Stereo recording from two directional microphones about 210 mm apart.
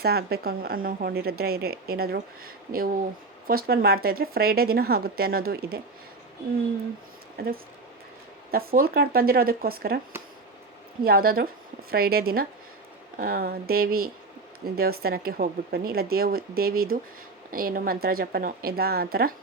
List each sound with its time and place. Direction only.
0.0 s speech: 50° right (ahead or behind)
7.3 s speech: 45° right (ahead or behind)
11.0 s speech: 45° right (ahead or behind)